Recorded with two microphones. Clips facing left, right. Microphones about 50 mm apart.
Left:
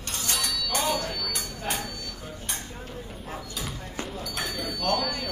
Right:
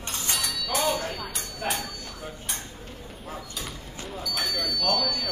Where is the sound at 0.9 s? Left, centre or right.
Right.